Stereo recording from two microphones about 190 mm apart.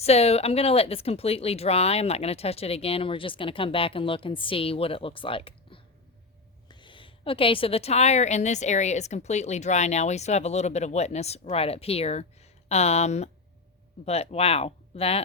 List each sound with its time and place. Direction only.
0.0 s a woman's voice: 35° left (ahead or behind)